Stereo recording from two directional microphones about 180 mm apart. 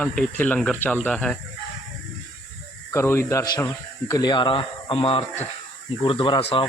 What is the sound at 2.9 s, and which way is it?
Speech, 15° left (ahead or behind).